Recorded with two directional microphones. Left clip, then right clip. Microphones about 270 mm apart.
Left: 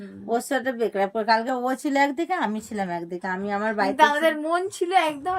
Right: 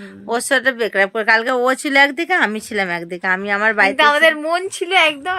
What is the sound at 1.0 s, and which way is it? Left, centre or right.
Speech, right.